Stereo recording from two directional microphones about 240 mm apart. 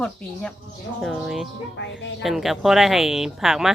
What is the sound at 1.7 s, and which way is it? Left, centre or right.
Speech, left.